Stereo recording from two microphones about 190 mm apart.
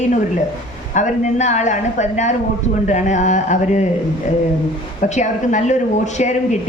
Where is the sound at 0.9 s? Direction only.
40° left (ahead or behind).